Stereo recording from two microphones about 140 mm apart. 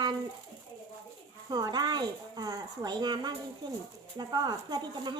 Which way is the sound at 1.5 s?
30° right (ahead or behind).